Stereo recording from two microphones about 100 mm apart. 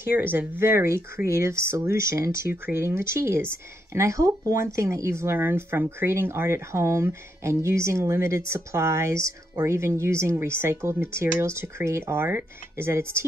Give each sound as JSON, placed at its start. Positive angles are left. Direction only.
{"t": 0.0, "sound": "speech", "side_deg": -20}